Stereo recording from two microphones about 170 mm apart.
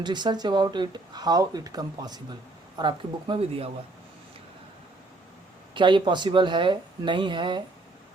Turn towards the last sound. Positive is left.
turn(degrees=-30)  # may be behind; listen again after turning